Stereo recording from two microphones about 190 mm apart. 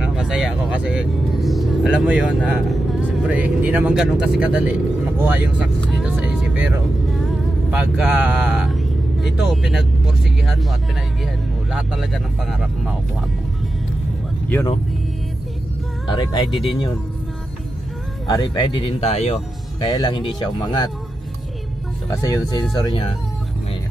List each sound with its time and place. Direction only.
0.0 s speech: 5° right (ahead or behind)
5.9 s vehicle: 5° right (ahead or behind)
7.7 s speech: 5° right (ahead or behind)
16.1 s speech: 20° left (ahead or behind)
18.2 s speech: 20° left (ahead or behind)
19.9 s speech: 25° left (ahead or behind)
22.2 s speech: 20° left (ahead or behind)